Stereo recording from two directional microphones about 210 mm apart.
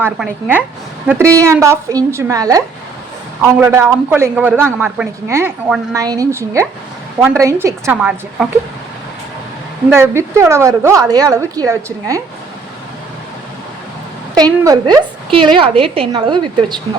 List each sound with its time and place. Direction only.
0.0 s a woman's voice: 10° right (ahead or behind)
9.9 s a woman's voice: 10° right (ahead or behind)
14.3 s a woman's voice: 15° right (ahead or behind)